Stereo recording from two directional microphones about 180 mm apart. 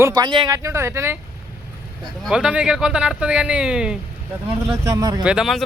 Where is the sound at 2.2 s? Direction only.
5° right (ahead or behind).